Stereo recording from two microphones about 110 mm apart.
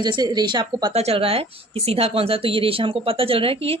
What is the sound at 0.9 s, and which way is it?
Speech, 70° right (ahead or behind).